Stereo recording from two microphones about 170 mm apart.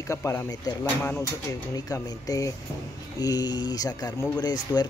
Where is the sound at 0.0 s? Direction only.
20° left (ahead or behind).